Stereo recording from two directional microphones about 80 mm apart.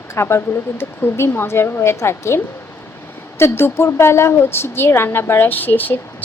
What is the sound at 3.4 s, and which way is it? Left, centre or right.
A woman's voice, left.